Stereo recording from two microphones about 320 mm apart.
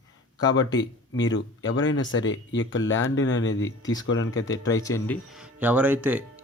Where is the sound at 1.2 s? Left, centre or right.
Left.